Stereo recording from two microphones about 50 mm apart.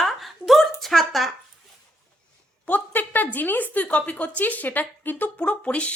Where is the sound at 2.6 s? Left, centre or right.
Left.